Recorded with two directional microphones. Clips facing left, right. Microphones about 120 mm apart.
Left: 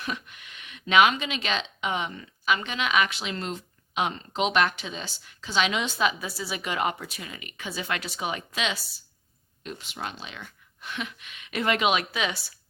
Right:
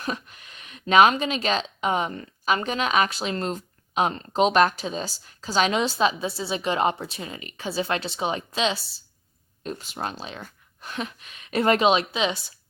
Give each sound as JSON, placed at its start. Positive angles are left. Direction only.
{"t": 0.0, "sound": "speech", "side_deg": -35}